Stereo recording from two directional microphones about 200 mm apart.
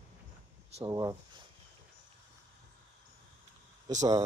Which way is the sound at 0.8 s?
20° right (ahead or behind).